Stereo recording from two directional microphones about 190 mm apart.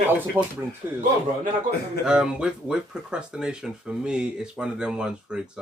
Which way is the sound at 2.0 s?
5° right (ahead or behind).